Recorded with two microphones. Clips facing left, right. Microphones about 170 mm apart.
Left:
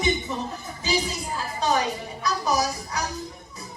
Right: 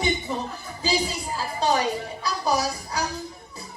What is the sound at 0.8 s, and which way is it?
A woman's voice, 30° right (ahead or behind).